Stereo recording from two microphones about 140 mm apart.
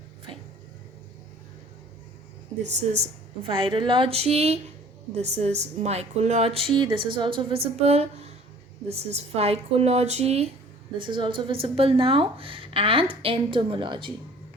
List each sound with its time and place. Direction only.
2.6 s a woman's voice: 55° right (ahead or behind)
3.4 s a woman's voice: 40° right (ahead or behind)
10.9 s speech: 35° right (ahead or behind)